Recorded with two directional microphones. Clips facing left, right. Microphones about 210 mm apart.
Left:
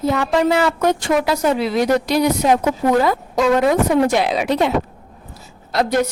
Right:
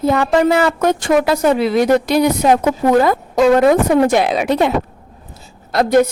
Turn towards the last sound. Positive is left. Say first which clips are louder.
# right 5 dB
turn(degrees=-50)  # may be behind; listen again after turning